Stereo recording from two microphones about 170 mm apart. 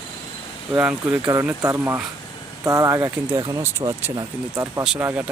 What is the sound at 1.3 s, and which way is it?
Speech, 20° right (ahead or behind).